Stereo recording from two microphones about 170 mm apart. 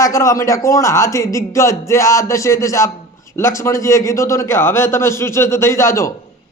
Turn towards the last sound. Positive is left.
turn(degrees=15)  # may be behind; listen again after turning